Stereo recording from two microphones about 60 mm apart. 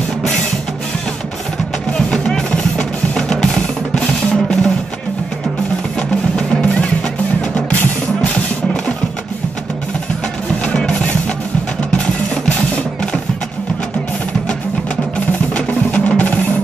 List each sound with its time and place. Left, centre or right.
2.0 s music: centre
5.9 s music: centre
10.6 s music: centre
15.5 s music: left